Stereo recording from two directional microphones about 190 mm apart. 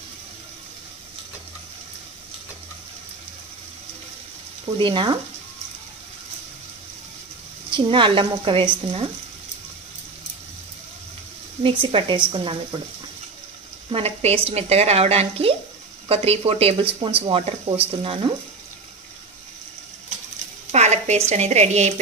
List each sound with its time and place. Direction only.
4.7 s a woman's voice: 25° right (ahead or behind)
7.7 s a woman's voice: 25° right (ahead or behind)
11.6 s a woman's voice: 25° right (ahead or behind)
13.8 s a woman's voice: 30° right (ahead or behind)
20.7 s a sound: 35° right (ahead or behind)
21.3 s speech: 35° right (ahead or behind)